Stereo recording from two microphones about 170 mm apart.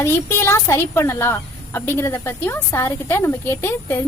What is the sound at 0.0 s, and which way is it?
Speech, 15° left (ahead or behind).